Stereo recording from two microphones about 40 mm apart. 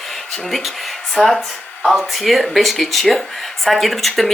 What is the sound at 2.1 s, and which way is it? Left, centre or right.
Speech, centre.